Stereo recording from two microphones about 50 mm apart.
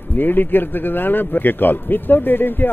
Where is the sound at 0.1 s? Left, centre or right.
Left.